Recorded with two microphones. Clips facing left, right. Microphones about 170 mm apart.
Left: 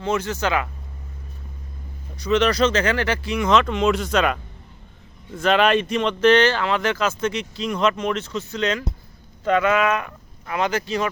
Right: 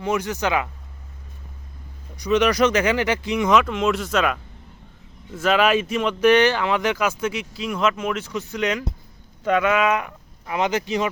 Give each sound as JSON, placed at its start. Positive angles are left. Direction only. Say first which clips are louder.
{"t": 0.0, "sound": "speech", "louder": "even", "side_deg": -15}
{"t": 2.1, "sound": "speech", "louder": "even", "side_deg": -15}